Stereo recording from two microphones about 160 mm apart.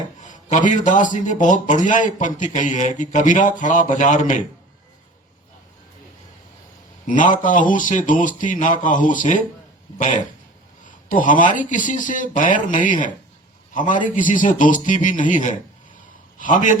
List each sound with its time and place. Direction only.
0.2 s a man's voice: 50° left (ahead or behind)
7.1 s a man's voice: 55° left (ahead or behind)
11.1 s a man's voice: 55° left (ahead or behind)